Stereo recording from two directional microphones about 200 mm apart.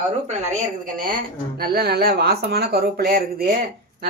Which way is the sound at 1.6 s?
50° right (ahead or behind).